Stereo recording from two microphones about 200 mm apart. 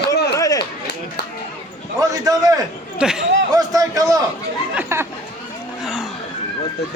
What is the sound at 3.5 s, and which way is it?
A man's voice, 20° right (ahead or behind).